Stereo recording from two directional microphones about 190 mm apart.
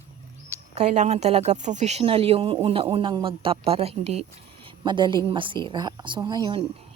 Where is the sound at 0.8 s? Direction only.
35° right (ahead or behind).